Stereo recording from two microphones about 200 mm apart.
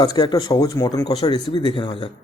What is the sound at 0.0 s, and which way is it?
A man's voice, 20° left (ahead or behind).